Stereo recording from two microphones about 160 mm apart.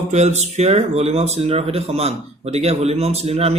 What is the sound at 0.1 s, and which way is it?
Speech, 45° right (ahead or behind).